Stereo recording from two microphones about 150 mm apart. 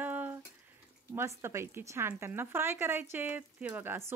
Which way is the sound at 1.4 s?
15° right (ahead or behind).